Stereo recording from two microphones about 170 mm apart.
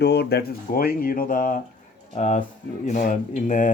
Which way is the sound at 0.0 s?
75° left (ahead or behind).